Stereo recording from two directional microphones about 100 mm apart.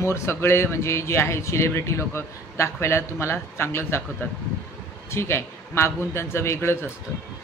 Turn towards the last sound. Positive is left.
turn(degrees=25)  # may be behind; listen again after turning